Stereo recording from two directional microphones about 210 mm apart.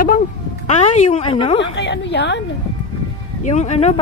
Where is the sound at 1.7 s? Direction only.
55° left (ahead or behind).